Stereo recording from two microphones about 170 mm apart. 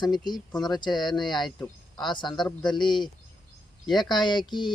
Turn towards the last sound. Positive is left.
turn(degrees=25)  # may be behind; listen again after turning